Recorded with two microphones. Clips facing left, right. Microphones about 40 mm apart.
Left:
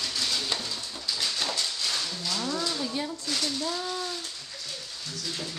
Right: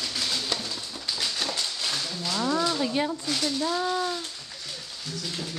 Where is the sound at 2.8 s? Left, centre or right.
Right.